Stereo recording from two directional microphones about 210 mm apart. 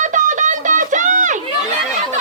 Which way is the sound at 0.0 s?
35° right (ahead or behind).